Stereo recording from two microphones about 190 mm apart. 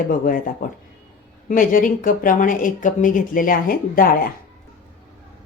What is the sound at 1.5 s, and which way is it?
A woman's voice, 45° left (ahead or behind).